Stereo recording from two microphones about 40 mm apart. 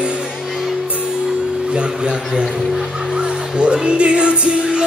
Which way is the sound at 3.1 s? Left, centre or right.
Right.